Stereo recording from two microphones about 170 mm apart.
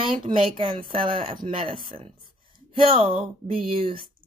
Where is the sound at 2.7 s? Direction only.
30° right (ahead or behind).